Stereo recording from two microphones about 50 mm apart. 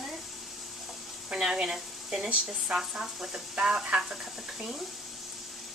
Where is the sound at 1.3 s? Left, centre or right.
Centre.